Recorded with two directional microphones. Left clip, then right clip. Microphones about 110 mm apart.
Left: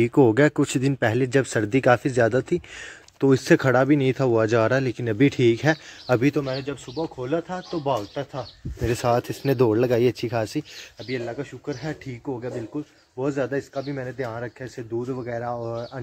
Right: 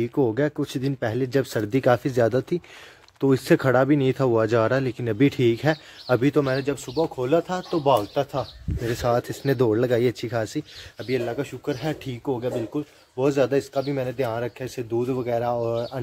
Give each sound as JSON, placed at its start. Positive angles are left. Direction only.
{"t": 0.0, "sound": "speech", "side_deg": 45}
{"t": 3.2, "sound": "speech", "side_deg": 15}
{"t": 6.7, "sound": "speech", "side_deg": -25}
{"t": 8.8, "sound": "speech", "side_deg": 30}
{"t": 11.3, "sound": "speech", "side_deg": -20}